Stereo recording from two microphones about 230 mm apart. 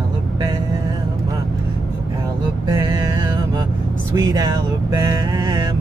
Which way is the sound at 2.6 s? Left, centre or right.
Centre.